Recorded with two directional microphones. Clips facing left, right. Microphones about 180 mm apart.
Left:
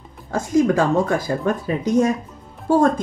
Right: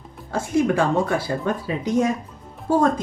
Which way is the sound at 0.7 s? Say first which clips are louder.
Left 2 dB; 45° left (ahead or behind).